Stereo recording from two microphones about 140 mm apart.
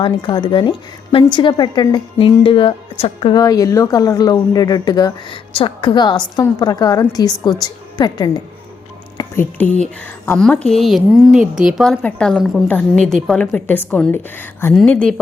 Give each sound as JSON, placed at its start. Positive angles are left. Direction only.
{"t": 0.0, "sound": "a woman's voice", "side_deg": 35}
{"t": 3.4, "sound": "speech", "side_deg": 25}
{"t": 9.1, "sound": "a woman's voice", "side_deg": 15}